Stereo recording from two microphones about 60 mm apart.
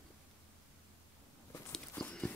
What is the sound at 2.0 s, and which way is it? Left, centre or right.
Horse, left.